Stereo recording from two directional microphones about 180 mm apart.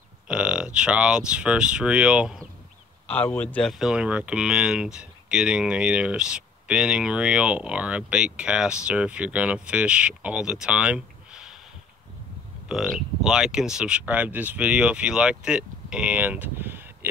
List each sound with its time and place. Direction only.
0.3 s speech: 5° right (ahead or behind)
3.1 s speech: 10° left (ahead or behind)
12.6 s speech: 5° right (ahead or behind)